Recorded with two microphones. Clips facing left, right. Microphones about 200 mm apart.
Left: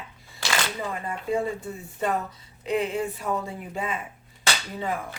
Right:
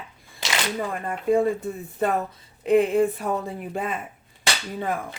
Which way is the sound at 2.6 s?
55° right (ahead or behind).